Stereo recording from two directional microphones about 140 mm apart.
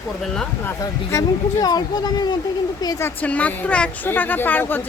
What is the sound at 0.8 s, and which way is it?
Speech, 25° left (ahead or behind).